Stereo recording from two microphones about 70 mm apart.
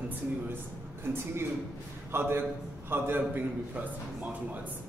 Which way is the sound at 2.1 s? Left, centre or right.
Right.